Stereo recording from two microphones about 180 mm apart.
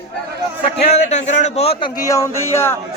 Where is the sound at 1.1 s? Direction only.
40° left (ahead or behind).